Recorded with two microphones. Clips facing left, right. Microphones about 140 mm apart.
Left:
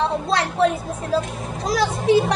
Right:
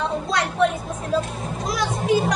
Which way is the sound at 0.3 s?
30° left (ahead or behind).